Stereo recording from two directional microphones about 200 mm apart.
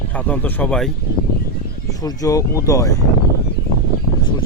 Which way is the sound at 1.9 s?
20° left (ahead or behind).